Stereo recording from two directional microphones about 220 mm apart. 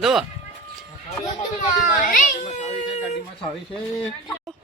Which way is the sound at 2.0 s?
35° left (ahead or behind).